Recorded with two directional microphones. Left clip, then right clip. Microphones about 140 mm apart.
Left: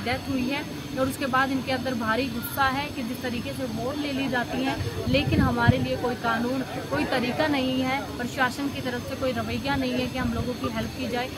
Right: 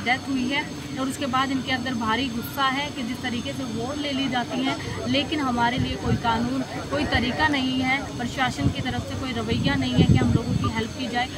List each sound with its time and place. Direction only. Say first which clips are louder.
1.3 s speech: right 2 dB; 25° left (ahead or behind)
4.2 s speech: right 1 dB; 25° left (ahead or behind)
7.0 s speech: right 3 dB; 20° left (ahead or behind)